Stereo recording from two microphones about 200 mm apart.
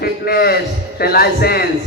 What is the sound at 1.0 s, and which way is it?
Speech, 50° left (ahead or behind).